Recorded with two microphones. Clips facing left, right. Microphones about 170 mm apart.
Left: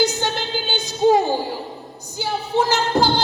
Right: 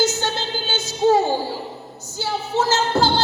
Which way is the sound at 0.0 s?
15° left (ahead or behind).